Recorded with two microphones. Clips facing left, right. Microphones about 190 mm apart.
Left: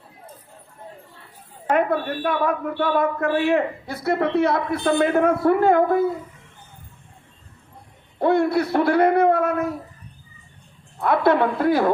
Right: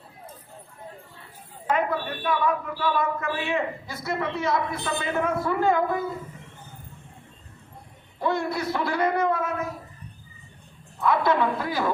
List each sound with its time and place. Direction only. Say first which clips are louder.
1.7 s speech: left 5 dB; 60° left (ahead or behind)
8.2 s speech: left 8 dB; 60° left (ahead or behind)
11.0 s speech: left 4 dB; 60° left (ahead or behind)